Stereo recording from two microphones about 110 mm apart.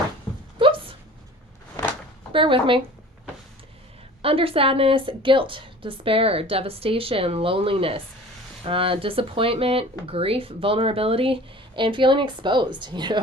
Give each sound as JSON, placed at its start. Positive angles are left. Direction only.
{"t": 0.6, "sound": "a sound", "side_deg": -55}
{"t": 2.3, "sound": "speech", "side_deg": -50}
{"t": 4.2, "sound": "a woman's voice", "side_deg": -60}